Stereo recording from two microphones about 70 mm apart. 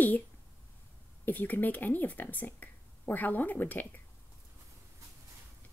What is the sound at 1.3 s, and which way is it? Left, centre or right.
Speech, left.